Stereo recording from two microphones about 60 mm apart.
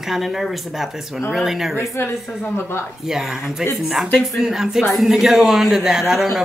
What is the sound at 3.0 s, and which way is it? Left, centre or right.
A man's voice, centre.